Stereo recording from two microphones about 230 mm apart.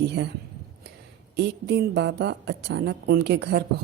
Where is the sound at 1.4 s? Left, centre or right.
Right.